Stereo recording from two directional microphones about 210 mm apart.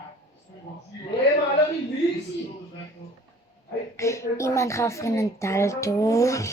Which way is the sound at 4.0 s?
15° left (ahead or behind).